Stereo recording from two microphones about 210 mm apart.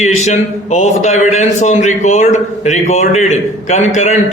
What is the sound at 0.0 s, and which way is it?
A man's voice, 35° left (ahead or behind).